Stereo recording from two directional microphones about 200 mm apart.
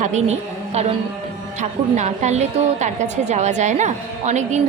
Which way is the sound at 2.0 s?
35° right (ahead or behind).